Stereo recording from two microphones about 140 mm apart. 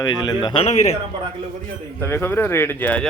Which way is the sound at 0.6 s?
50° left (ahead or behind).